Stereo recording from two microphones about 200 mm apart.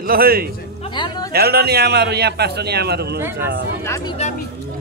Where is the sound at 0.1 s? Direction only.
50° right (ahead or behind).